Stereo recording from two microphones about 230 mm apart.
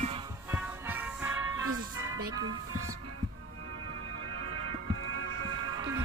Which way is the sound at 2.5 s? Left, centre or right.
Right.